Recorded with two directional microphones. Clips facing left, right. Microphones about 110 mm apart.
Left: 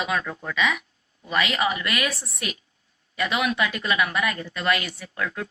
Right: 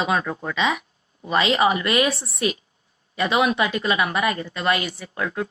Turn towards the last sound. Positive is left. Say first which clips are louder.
# right 3 dB
turn(degrees=-25)  # may be behind; listen again after turning